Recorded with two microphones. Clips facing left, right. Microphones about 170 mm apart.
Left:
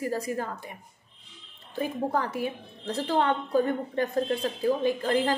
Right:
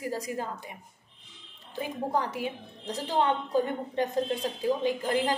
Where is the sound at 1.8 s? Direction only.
15° right (ahead or behind).